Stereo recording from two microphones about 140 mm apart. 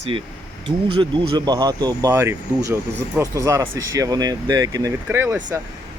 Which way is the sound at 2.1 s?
20° right (ahead or behind).